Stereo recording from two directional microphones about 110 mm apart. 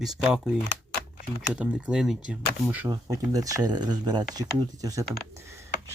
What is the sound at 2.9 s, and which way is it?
Speech, 35° right (ahead or behind).